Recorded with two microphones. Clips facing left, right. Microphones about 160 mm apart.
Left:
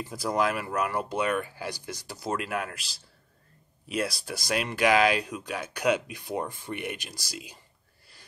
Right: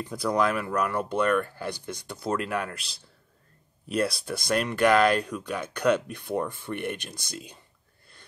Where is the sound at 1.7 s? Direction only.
60° right (ahead or behind).